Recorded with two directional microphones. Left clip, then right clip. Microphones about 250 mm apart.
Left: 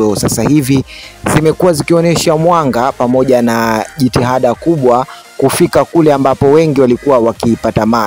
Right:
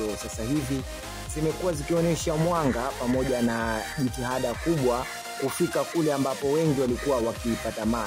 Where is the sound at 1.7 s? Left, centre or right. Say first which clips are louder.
Left 16 dB; left.